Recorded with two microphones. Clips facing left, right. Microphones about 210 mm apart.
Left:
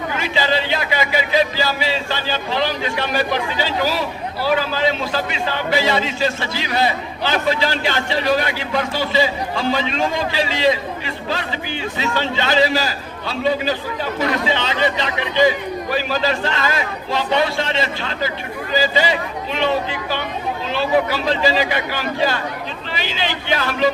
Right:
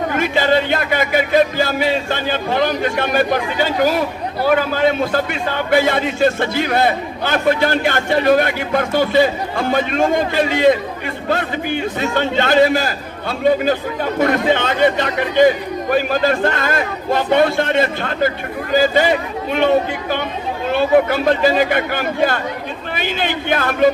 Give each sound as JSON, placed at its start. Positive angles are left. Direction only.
{"t": 0.1, "sound": "a man's voice", "side_deg": -55}